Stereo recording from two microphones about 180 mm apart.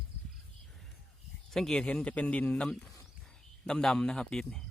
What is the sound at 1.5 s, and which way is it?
Speech, centre (ahead or behind).